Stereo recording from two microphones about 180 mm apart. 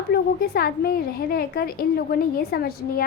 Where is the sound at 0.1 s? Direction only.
60° left (ahead or behind).